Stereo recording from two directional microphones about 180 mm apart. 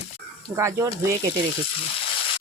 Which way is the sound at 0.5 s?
15° right (ahead or behind).